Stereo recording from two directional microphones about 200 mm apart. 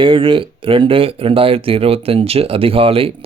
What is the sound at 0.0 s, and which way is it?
Speech, 25° right (ahead or behind).